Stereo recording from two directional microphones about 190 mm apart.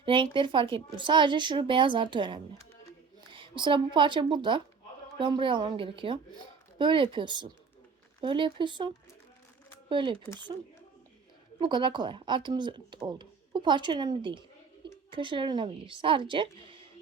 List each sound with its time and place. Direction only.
0.0 s speech: 25° right (ahead or behind)
9.9 s speech: 25° right (ahead or behind)
11.6 s speech: 25° right (ahead or behind)